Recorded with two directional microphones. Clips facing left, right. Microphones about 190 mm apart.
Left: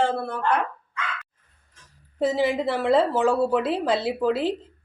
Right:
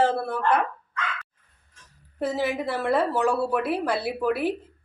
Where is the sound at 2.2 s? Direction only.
15° left (ahead or behind).